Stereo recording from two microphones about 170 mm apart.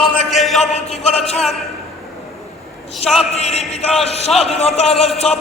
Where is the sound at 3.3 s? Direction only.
35° left (ahead or behind).